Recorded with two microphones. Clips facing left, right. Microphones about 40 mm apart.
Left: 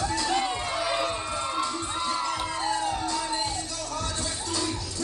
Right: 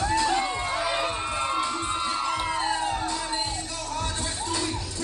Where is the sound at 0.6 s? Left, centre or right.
Right.